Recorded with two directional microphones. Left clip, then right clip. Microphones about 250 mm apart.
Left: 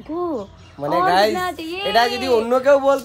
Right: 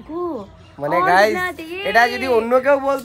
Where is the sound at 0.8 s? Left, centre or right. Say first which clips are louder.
Right 2 dB; centre.